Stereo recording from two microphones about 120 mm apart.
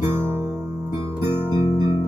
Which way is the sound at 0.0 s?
20° right (ahead or behind).